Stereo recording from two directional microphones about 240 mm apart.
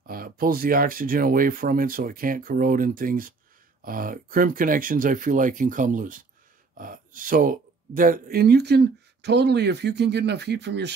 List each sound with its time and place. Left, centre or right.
0.0 s speech: right